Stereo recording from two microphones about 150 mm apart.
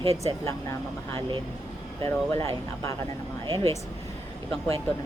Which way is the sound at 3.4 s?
30° right (ahead or behind).